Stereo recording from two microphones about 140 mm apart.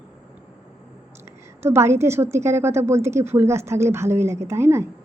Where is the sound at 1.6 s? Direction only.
20° right (ahead or behind).